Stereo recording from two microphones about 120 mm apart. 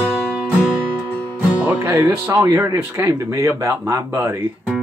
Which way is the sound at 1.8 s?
20° right (ahead or behind).